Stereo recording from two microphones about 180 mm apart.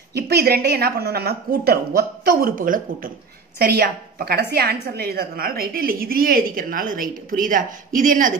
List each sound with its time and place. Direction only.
0.1 s a woman's voice: 65° right (ahead or behind)